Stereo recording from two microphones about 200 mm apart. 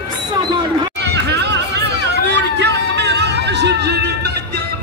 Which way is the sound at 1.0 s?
55° right (ahead or behind).